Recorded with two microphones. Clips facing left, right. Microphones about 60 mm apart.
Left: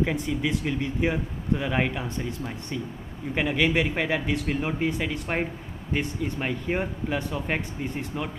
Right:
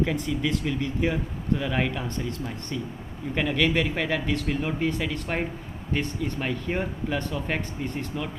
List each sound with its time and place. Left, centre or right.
0.0 s speech: centre